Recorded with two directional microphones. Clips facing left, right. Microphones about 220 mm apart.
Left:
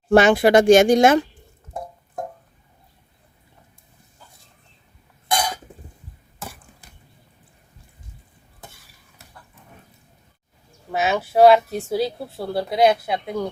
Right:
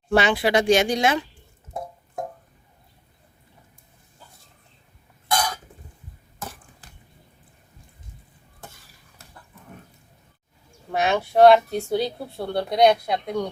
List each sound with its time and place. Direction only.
0.1 s speech: 50° left (ahead or behind)
5.3 s cough: 20° left (ahead or behind)
10.9 s speech: 5° left (ahead or behind)